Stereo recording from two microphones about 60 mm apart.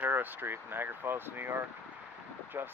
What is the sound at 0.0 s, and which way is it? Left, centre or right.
Speech, right.